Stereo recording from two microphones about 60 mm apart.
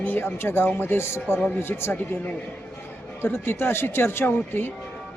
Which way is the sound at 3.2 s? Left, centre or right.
Left.